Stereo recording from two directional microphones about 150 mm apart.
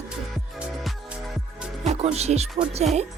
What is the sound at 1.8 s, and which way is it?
Speech, 50° right (ahead or behind).